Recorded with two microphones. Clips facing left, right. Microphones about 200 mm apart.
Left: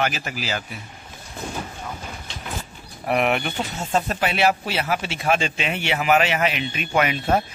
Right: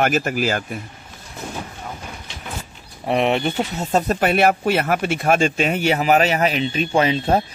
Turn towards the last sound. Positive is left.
turn(degrees=-30)  # may be behind; listen again after turning